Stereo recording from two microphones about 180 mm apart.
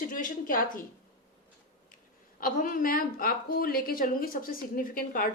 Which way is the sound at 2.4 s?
50° left (ahead or behind).